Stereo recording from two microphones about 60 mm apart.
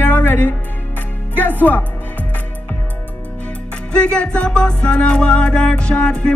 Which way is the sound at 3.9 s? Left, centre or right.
Centre.